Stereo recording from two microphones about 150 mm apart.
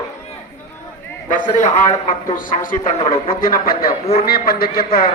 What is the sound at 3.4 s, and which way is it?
Speech, 75° left (ahead or behind).